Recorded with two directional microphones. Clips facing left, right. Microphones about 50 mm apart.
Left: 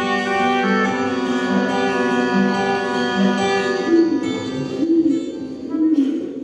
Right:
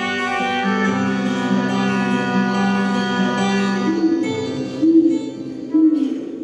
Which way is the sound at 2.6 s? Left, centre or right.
Left.